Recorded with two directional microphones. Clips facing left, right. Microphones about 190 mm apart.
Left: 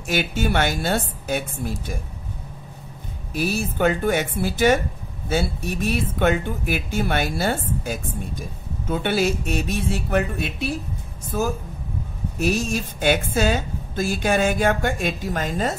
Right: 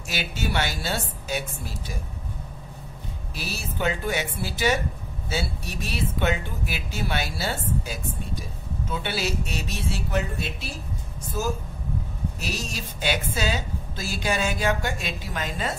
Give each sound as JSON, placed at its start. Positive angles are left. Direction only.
{"t": 0.1, "sound": "speech", "side_deg": 50}
{"t": 3.3, "sound": "speech", "side_deg": 50}
{"t": 12.4, "sound": "speech", "side_deg": 50}